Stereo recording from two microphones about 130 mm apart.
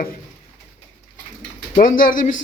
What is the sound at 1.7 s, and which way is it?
Speech, 90° left.